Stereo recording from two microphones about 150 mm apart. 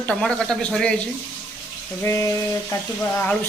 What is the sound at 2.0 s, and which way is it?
Speech, 20° left (ahead or behind).